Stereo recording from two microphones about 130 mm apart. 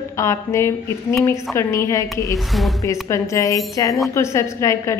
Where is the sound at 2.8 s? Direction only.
25° left (ahead or behind).